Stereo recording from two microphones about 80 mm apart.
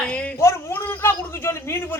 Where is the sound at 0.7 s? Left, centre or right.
Left.